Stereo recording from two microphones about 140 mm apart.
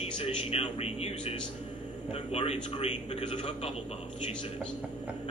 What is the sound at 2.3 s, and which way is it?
A man's voice, 45° left (ahead or behind).